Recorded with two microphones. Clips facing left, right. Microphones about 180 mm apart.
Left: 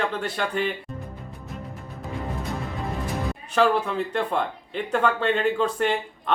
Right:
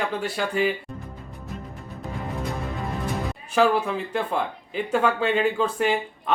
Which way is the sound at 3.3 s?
5° right (ahead or behind).